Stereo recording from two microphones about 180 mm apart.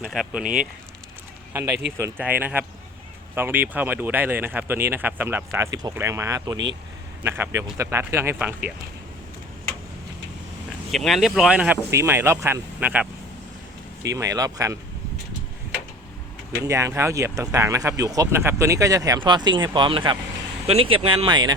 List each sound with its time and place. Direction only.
0.0 s speech: centre (ahead or behind)
2.0 s speech: 15° right (ahead or behind)
10.9 s speech: centre (ahead or behind); by 14.8 s 20° right (ahead or behind)
16.6 s speech: 15° right (ahead or behind)